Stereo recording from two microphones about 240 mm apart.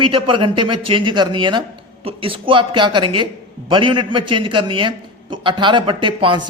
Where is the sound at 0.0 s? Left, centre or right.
Right.